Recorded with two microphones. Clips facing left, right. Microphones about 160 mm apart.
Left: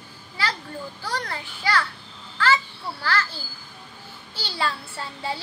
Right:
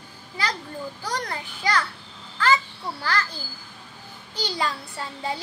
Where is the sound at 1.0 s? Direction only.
20° right (ahead or behind).